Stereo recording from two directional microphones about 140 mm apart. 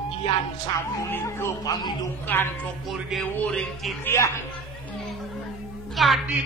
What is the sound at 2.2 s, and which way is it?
Speech, 15° left (ahead or behind).